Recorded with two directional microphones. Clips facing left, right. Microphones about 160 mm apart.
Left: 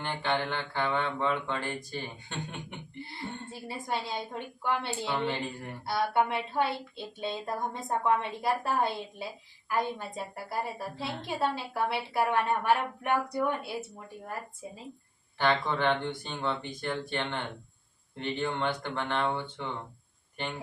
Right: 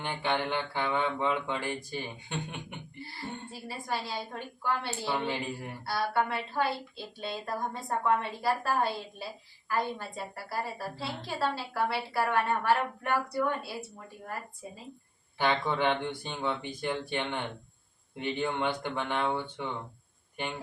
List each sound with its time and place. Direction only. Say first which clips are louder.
0.0 s speech: even; 10° right (ahead or behind)
3.2 s a woman's voice: even; 20° left (ahead or behind)
5.0 s speech: even; 10° right (ahead or behind)
5.8 s a woman's voice: left 2 dB; 20° left (ahead or behind)
15.4 s speech: even; 10° right (ahead or behind)